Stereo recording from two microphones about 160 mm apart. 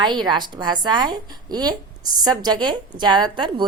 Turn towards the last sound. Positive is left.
turn(degrees=-30)  # may be behind; listen again after turning